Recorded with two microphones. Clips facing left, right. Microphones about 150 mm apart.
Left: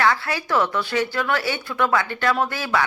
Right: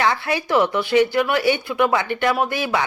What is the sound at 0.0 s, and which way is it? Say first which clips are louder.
Speech: right 1 dB; 20° right (ahead or behind).